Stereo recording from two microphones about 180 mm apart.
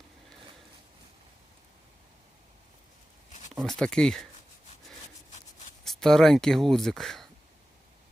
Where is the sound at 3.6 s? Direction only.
5° left (ahead or behind).